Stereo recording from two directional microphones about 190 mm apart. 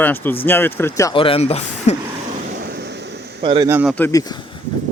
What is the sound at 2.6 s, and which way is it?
Vehicle, 55° right (ahead or behind).